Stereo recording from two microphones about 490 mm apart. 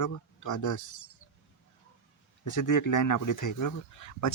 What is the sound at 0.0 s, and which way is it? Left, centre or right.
Speech, left.